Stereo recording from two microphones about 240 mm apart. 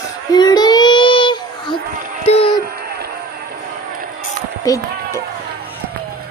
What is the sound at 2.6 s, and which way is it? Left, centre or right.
Music, right.